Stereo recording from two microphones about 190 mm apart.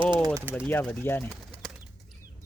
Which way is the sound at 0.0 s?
25° right (ahead or behind).